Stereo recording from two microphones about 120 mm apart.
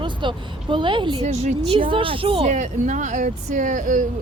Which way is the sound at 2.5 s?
90° right.